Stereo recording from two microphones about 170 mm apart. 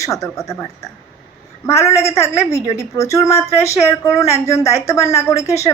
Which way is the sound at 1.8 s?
15° left (ahead or behind).